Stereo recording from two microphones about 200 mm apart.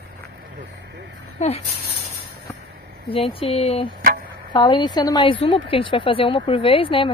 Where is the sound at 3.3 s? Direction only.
30° left (ahead or behind).